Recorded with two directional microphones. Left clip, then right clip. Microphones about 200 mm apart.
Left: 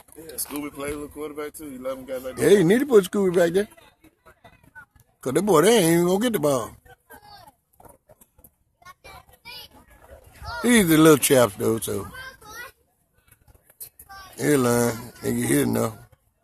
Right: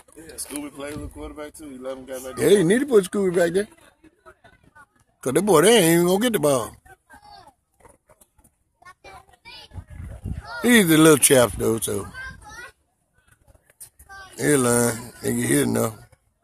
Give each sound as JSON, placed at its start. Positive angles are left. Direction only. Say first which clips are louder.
{"t": 0.6, "sound": "speech", "louder": "left 3 dB", "side_deg": 55}
{"t": 2.5, "sound": "speech", "louder": "left 1 dB", "side_deg": 10}
{"t": 4.2, "sound": "a sound", "louder": "right 4 dB", "side_deg": 50}
{"t": 5.2, "sound": "speech", "louder": "right 2 dB", "side_deg": -10}
{"t": 8.8, "sound": "child singing", "louder": "right 1 dB", "side_deg": 55}
{"t": 10.6, "sound": "speech", "louder": "right 1 dB", "side_deg": -10}
{"t": 12.1, "sound": "children playing", "louder": "right 2 dB", "side_deg": 50}
{"t": 13.7, "sound": "a sound", "louder": "right 1 dB", "side_deg": 50}
{"t": 14.3, "sound": "speech", "louder": "right 1 dB", "side_deg": -5}